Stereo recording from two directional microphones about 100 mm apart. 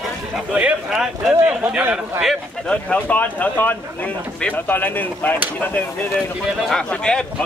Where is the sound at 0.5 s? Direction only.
10° right (ahead or behind).